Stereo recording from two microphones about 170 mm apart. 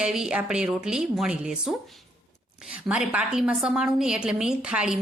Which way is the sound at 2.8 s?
5° right (ahead or behind).